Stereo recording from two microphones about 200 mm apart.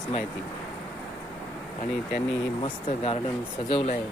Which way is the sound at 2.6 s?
30° left (ahead or behind).